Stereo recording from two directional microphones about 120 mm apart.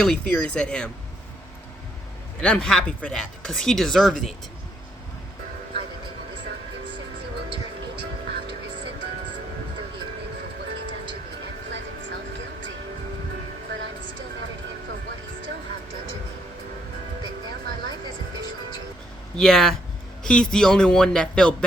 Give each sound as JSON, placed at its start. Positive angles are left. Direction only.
{"t": 0.0, "sound": "speech", "side_deg": 10}
{"t": 2.4, "sound": "speech", "side_deg": 10}
{"t": 19.4, "sound": "speech", "side_deg": 5}